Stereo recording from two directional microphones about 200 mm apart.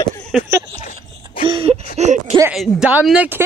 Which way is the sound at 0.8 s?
40° left (ahead or behind).